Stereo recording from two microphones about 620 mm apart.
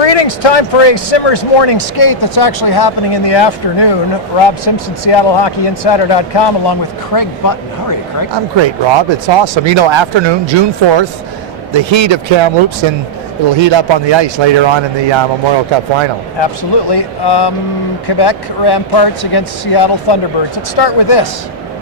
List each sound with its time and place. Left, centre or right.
0.0 s speech: left
8.3 s speech: right
16.4 s speech: left